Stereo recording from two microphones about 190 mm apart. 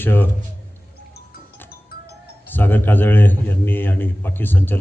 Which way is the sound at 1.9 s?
55° left (ahead or behind).